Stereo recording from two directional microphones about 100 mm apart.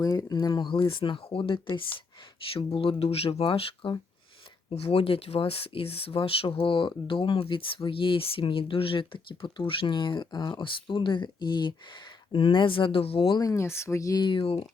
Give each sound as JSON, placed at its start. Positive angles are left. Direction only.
{"t": 0.0, "sound": "speech", "side_deg": 35}
{"t": 4.7, "sound": "speech", "side_deg": 85}
{"t": 13.3, "sound": "speech", "side_deg": 35}
{"t": 14.3, "sound": "speech", "side_deg": 65}